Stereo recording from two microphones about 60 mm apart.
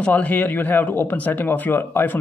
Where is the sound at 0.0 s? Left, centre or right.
Left.